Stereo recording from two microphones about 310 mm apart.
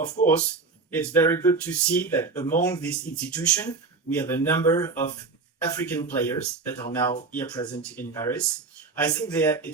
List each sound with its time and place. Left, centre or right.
0.2 s speech: left
0.9 s speech: centre